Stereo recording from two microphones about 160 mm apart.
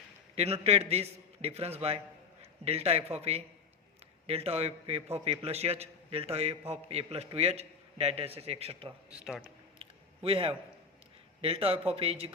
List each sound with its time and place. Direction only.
0.3 s a man's voice: 40° right (ahead or behind)
9.0 s a man's voice: 5° right (ahead or behind)
10.2 s a man's voice: 35° right (ahead or behind)